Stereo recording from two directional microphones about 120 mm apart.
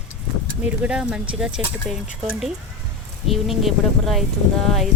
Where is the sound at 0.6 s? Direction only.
10° right (ahead or behind).